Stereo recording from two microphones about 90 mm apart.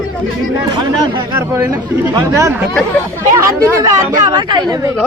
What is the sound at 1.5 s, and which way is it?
Speech, 20° right (ahead or behind).